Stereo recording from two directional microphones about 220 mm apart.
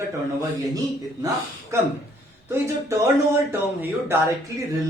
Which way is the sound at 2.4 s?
10° right (ahead or behind).